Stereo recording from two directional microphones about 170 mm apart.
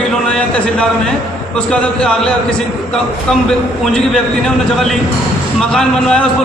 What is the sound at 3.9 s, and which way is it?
Speech, centre (ahead or behind).